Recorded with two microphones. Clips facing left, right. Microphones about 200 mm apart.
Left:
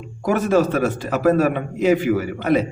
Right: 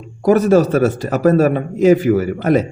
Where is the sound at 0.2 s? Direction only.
40° right (ahead or behind).